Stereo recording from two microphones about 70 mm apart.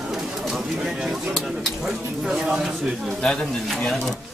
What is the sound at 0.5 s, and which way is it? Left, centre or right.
Speech, centre.